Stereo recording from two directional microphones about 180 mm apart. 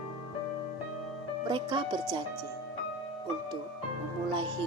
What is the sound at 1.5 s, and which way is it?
Speech, 25° right (ahead or behind).